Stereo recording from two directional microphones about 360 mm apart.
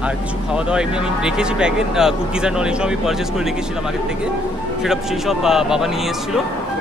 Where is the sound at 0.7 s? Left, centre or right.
Centre.